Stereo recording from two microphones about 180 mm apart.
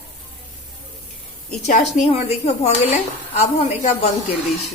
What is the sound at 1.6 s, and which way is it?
A woman's voice, 40° left (ahead or behind).